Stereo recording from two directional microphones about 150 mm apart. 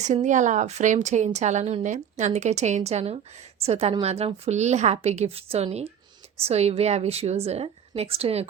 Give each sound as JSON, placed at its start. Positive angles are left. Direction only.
{"t": 0.0, "sound": "a woman's voice", "side_deg": -55}